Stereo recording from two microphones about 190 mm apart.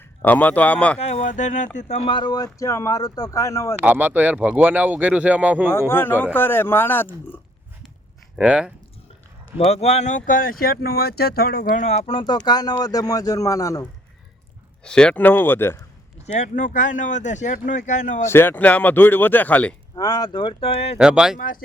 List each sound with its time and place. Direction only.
0.2 s speech: 10° left (ahead or behind)
0.9 s speech: 35° left (ahead or behind)
2.0 s speech: 25° left (ahead or behind)
3.8 s speech: 10° right (ahead or behind)
5.9 s speech: 10° left (ahead or behind)
8.4 s speech: 5° right (ahead or behind)
9.6 s a man's voice: 35° left (ahead or behind); by 13.8 s 15° left (ahead or behind)
14.8 s a man's voice: 5° left (ahead or behind)
16.2 s speech: 40° left (ahead or behind)
18.3 s speech: 10° left (ahead or behind)
20.0 s a man's voice: 20° left (ahead or behind)
21.0 s speech: 5° right (ahead or behind)
21.3 s speech: 45° left (ahead or behind)